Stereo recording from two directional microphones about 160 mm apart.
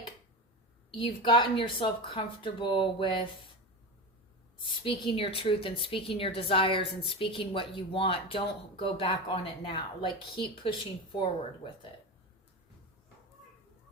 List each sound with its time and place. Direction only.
0.9 s a woman's voice: 30° left (ahead or behind)
4.8 s a woman's voice: 35° left (ahead or behind)